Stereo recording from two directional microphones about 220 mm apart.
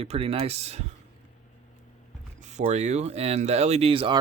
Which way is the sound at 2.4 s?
30° right (ahead or behind).